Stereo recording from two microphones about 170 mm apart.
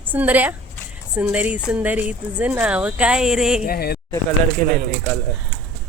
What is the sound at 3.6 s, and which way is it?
Speech, 65° left (ahead or behind).